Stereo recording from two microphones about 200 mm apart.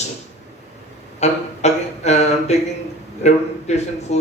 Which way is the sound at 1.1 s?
35° left (ahead or behind).